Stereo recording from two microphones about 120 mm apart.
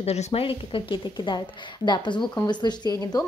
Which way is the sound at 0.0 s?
60° left (ahead or behind).